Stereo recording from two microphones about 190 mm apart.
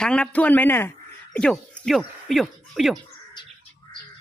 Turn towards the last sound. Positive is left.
turn(degrees=25)  # may be behind; listen again after turning